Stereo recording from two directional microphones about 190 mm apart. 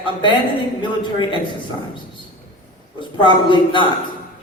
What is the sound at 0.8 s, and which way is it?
Speech, 25° left (ahead or behind).